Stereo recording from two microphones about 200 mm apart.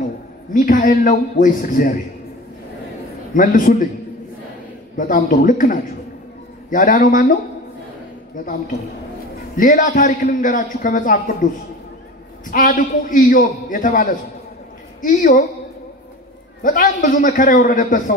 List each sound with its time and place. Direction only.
0.0 s a man's voice: 40° left (ahead or behind)
3.3 s a man's voice: 40° left (ahead or behind)
4.9 s a man's voice: 40° left (ahead or behind)
9.6 s a man's voice: 40° left (ahead or behind)
12.4 s a man's voice: 40° left (ahead or behind)
16.6 s a man's voice: 40° left (ahead or behind)